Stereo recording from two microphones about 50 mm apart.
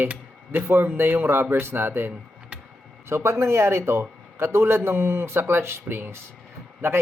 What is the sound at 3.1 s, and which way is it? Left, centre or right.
A man's voice, right.